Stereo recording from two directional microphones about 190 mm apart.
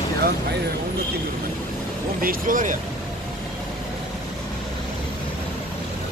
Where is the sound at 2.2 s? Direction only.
45° right (ahead or behind).